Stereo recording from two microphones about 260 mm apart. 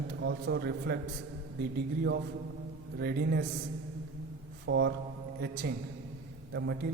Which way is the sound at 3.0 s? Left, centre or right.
Right.